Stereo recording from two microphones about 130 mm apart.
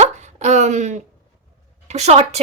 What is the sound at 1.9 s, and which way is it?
Speech, 55° right (ahead or behind).